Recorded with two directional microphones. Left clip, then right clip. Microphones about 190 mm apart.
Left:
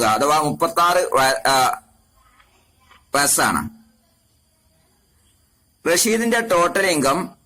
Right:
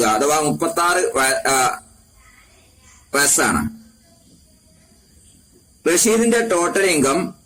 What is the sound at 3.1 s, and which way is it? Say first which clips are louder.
Speech: right 1 dB; 35° left (ahead or behind).